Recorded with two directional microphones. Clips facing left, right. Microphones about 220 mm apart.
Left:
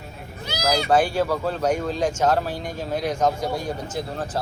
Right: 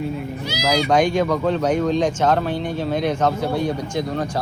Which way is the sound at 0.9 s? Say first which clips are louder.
Right 2 dB; 5° left (ahead or behind).